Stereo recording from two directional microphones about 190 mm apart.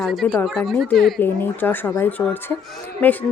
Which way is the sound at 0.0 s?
Centre (ahead or behind).